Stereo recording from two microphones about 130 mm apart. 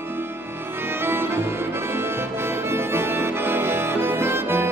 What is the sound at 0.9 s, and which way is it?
Accordion, 15° right (ahead or behind).